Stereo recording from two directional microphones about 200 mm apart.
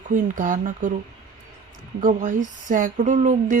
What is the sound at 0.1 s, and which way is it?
Speech, 40° right (ahead or behind).